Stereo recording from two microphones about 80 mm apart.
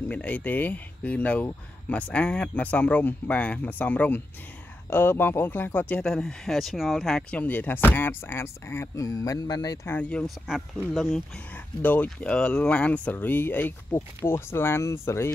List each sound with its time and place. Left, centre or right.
0.1 s speech: left
6.0 s speech: centre
7.2 s speech: centre; by 9.8 s left
9.8 s speech: centre
10.2 s speech: centre
11.5 s speech: centre